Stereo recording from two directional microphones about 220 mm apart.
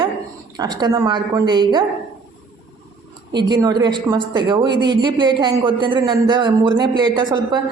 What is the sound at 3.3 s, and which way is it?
Speech, 20° right (ahead or behind).